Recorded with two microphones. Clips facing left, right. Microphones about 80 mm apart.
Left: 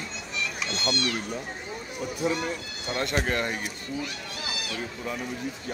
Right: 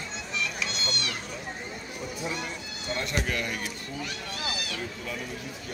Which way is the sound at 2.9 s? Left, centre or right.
Left.